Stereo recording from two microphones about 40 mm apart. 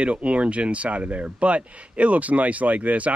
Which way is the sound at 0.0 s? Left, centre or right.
Right.